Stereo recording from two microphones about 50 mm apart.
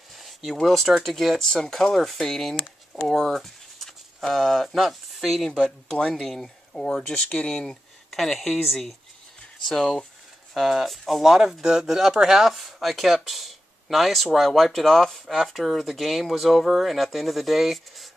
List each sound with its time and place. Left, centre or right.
0.1 s speech: centre
3.2 s a sound: centre
4.2 s speech: centre
5.5 s speech: centre
8.1 s speech: centre
10.5 s speech: centre